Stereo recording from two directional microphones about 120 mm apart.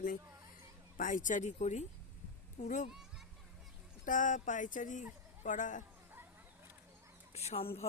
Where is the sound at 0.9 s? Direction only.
90° left.